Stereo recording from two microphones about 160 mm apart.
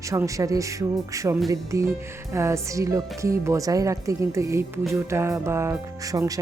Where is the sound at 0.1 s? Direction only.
20° right (ahead or behind).